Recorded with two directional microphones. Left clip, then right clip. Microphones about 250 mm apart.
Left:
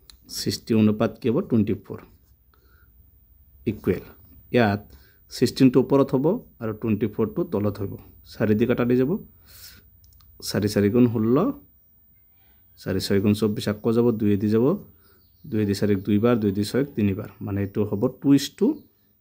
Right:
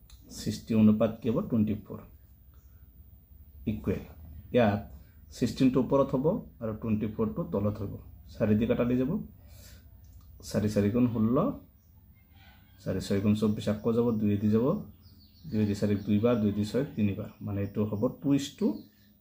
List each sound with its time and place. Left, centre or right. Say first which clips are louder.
0.7 s speech: left 3 dB; left
3.6 s speech: left 8 dB; left
10.3 s speech: left 6 dB; left
12.7 s speech: left 8 dB; left